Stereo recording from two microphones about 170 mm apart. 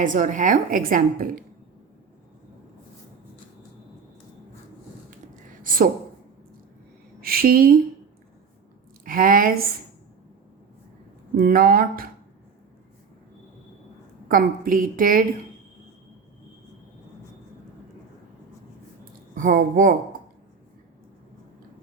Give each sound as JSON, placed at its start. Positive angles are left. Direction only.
{"t": 0.0, "sound": "a woman's voice", "side_deg": -50}
{"t": 5.6, "sound": "a woman's voice", "side_deg": -55}
{"t": 7.2, "sound": "speech", "side_deg": -60}
{"t": 9.0, "sound": "a woman's voice", "side_deg": -55}
{"t": 11.3, "sound": "speech", "side_deg": -60}
{"t": 14.3, "sound": "a woman's voice", "side_deg": -55}
{"t": 19.1, "sound": "speech", "side_deg": -55}